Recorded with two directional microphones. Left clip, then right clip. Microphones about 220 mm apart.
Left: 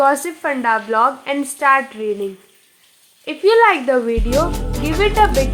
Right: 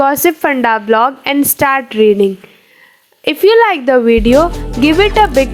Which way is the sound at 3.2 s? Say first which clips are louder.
Right 4 dB; 40° right (ahead or behind).